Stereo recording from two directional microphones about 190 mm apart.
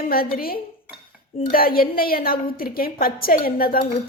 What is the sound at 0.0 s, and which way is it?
A woman's voice, 50° left (ahead or behind).